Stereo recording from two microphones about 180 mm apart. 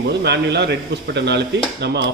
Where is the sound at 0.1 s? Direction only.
70° right (ahead or behind).